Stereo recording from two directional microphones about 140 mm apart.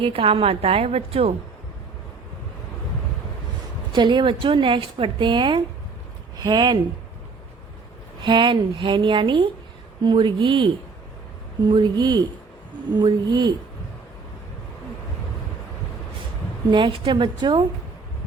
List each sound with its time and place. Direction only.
0.0 s a woman's voice: 40° right (ahead or behind)
3.9 s a woman's voice: 35° right (ahead or behind)
8.2 s a woman's voice: 35° right (ahead or behind)
11.7 s a woman's voice: 30° right (ahead or behind)
16.6 s a woman's voice: 35° right (ahead or behind)